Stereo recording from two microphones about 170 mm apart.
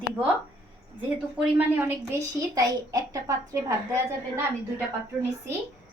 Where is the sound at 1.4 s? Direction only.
10° right (ahead or behind).